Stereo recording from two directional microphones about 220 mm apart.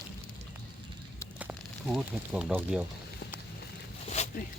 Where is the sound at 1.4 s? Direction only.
5° right (ahead or behind).